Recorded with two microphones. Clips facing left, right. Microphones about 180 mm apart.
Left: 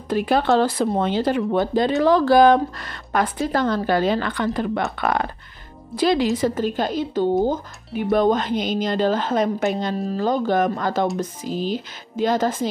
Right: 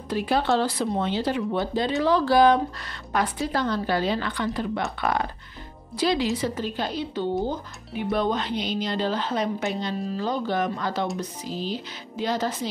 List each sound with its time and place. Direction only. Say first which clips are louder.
0.1 s speech: left 5 dB; 50° left (ahead or behind)
5.9 s speech: left 5 dB; 50° left (ahead or behind)